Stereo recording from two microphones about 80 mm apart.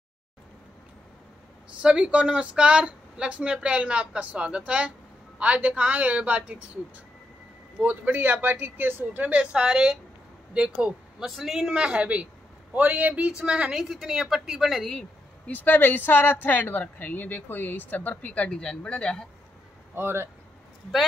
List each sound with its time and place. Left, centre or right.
1.8 s speech: centre
7.8 s a woman's voice: right
11.2 s speech: centre
15.4 s speech: left
20.0 s speech: right